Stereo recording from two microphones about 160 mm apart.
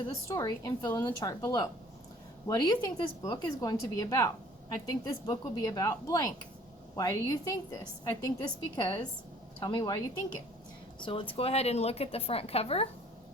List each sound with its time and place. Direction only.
0.3 s a woman's voice: 25° left (ahead or behind)
11.0 s speech: 30° left (ahead or behind)